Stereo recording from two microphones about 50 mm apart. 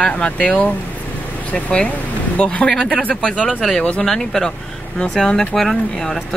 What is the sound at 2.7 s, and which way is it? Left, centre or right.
Speech, centre.